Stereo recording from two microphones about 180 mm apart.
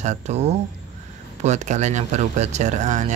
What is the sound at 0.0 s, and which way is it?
Speech, 40° right (ahead or behind).